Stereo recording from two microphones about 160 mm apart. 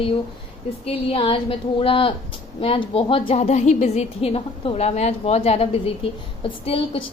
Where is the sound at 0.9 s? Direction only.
35° left (ahead or behind).